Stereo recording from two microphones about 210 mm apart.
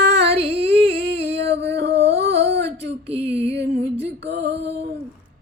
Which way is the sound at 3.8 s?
55° right (ahead or behind).